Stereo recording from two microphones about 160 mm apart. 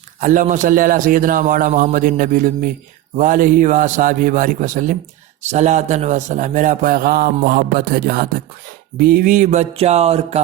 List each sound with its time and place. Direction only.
0.2 s a man's voice: 55° right (ahead or behind)